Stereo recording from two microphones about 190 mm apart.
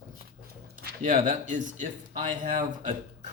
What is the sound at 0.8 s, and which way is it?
Speech, 45° right (ahead or behind).